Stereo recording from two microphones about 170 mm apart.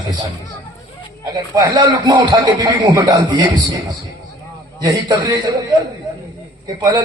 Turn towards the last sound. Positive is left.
turn(degrees=-25)  # may be behind; listen again after turning